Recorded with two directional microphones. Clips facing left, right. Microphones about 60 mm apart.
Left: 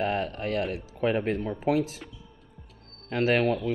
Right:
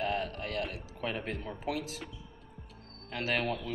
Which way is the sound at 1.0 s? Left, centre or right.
Left.